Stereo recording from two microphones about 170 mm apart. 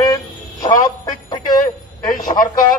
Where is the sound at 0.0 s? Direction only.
20° left (ahead or behind).